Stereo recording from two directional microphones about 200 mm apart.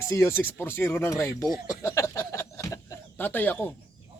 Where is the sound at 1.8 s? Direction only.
15° left (ahead or behind).